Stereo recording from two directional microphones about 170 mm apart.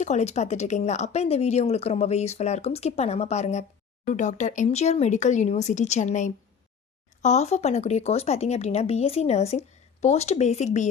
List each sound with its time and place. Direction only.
0.0 s speech: 40° left (ahead or behind)